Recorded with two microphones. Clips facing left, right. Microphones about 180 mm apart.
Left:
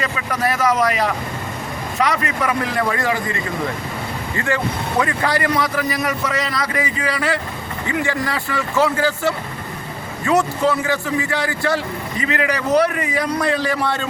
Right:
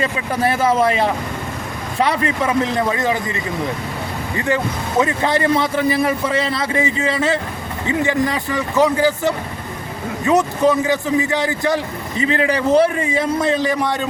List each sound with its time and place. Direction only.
0.0 s speech: 30° right (ahead or behind)
12.2 s speech: 30° right (ahead or behind)